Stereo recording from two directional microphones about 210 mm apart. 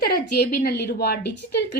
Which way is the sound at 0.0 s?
50° left (ahead or behind).